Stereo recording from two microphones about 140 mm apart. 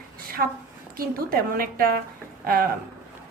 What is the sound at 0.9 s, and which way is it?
A woman's voice, 90° right.